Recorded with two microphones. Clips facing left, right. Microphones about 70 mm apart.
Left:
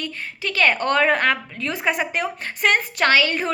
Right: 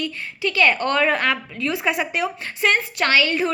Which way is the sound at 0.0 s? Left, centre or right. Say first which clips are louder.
Right 3 dB; left.